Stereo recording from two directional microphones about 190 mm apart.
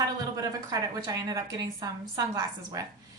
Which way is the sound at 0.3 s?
20° right (ahead or behind).